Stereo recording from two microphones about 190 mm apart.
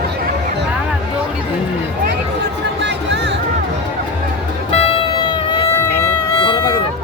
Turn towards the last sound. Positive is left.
turn(degrees=20)  # may be behind; listen again after turning